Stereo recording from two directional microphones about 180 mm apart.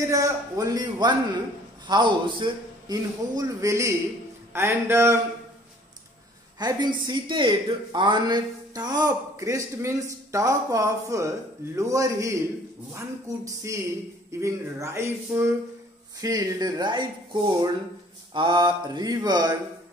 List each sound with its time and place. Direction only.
0.0 s a man's voice: 20° right (ahead or behind)
6.6 s speech: 25° right (ahead or behind)
13.6 s a man's voice: 15° right (ahead or behind)